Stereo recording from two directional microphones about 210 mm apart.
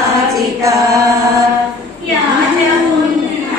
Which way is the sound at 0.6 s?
15° right (ahead or behind).